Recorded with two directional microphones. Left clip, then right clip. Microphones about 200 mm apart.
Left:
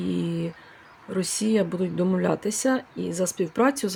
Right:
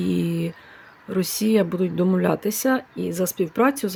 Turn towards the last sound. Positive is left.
turn(degrees=-5)  # may be behind; listen again after turning